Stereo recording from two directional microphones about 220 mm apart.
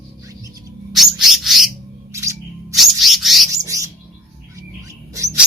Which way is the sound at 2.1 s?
15° right (ahead or behind).